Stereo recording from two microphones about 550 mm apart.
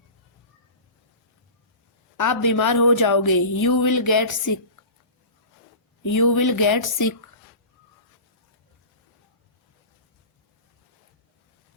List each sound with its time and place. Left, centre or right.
2.1 s a woman's voice: left
6.1 s a woman's voice: left